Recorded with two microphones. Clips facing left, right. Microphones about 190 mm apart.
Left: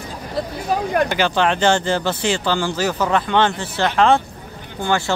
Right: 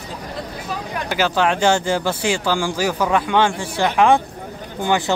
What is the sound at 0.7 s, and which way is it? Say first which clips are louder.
Speech: left 9 dB; 45° left (ahead or behind).